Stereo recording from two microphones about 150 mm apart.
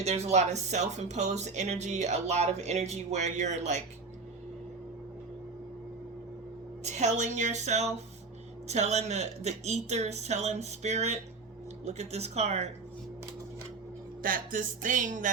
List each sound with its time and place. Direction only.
0.0 s speech: 45° right (ahead or behind)
6.8 s speech: 50° right (ahead or behind)
14.2 s music: 65° right (ahead or behind)